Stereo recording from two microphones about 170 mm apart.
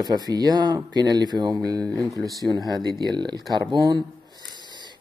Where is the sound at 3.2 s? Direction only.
25° right (ahead or behind).